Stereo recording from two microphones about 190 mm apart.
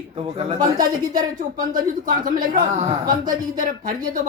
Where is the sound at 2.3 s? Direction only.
45° right (ahead or behind).